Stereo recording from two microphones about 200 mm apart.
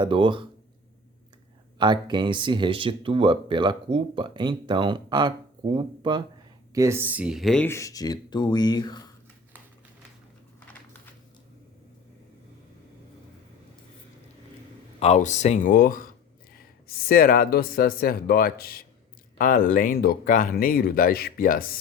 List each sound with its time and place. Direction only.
0.0 s speech: 25° right (ahead or behind)
1.8 s speech: 20° right (ahead or behind)
6.7 s speech: 15° right (ahead or behind); by 9.1 s 20° left (ahead or behind)
14.9 s speech: 35° left (ahead or behind)
17.1 s speech: 45° left (ahead or behind)